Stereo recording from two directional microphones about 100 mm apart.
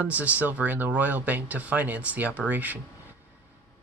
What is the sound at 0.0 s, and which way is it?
Speech, 15° right (ahead or behind).